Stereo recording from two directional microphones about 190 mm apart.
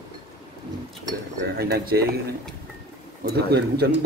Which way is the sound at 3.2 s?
55° right (ahead or behind).